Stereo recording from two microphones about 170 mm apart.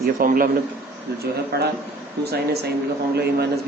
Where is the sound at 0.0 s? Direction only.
55° right (ahead or behind).